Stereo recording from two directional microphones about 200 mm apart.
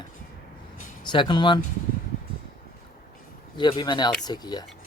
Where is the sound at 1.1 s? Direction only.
20° left (ahead or behind).